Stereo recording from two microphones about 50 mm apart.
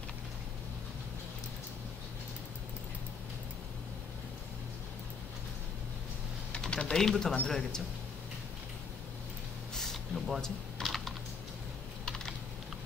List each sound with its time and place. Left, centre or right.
6.6 s a man's voice: centre
10.1 s a sound: centre
10.4 s typing: centre